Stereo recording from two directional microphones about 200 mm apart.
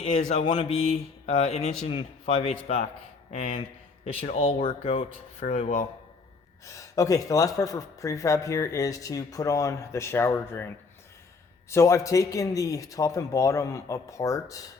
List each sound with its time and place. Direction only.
0.0 s mantra: 35° left (ahead or behind)
0.4 s speech: 25° left (ahead or behind)
1.3 s mantra: 35° left (ahead or behind)
1.9 s speech: 30° left (ahead or behind)
6.7 s speech: 15° left (ahead or behind)
11.7 s speech: 15° left (ahead or behind)